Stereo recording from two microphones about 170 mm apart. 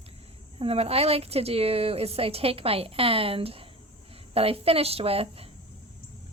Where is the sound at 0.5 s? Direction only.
35° right (ahead or behind).